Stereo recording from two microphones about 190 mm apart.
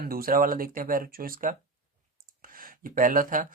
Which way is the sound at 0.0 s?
50° right (ahead or behind).